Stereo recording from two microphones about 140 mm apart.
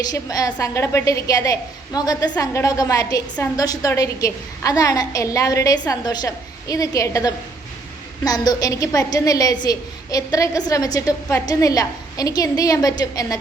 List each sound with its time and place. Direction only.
0.0 s a woman's voice: 25° left (ahead or behind)